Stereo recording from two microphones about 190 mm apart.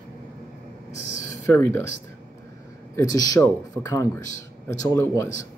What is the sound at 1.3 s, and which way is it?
Speech, 15° left (ahead or behind).